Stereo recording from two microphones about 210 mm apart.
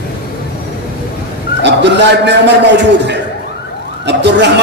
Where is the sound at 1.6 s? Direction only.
55° right (ahead or behind).